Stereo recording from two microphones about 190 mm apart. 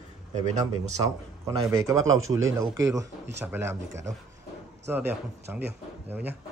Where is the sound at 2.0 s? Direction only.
90° right.